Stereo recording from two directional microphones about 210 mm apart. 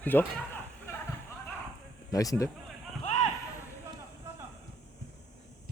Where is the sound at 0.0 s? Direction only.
10° left (ahead or behind).